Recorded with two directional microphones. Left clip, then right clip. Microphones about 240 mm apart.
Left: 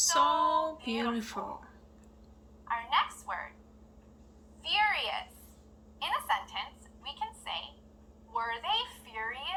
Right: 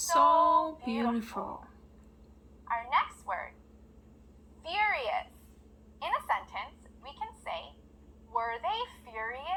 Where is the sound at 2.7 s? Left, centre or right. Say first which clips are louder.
Even; right.